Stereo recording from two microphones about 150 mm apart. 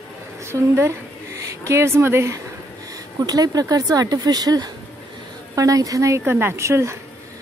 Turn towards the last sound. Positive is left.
turn(degrees=-20)  # may be behind; listen again after turning